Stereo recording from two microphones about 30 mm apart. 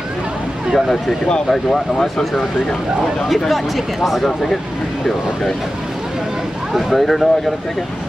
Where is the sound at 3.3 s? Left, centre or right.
Centre.